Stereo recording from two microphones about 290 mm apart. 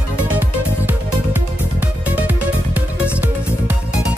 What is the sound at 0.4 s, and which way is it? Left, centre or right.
Music, centre.